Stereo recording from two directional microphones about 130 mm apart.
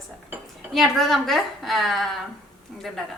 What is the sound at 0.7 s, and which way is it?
A woman's voice, centre (ahead or behind).